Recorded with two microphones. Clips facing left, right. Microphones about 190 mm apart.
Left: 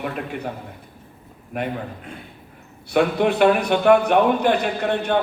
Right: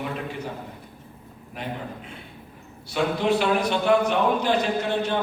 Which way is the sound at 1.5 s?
60° left (ahead or behind).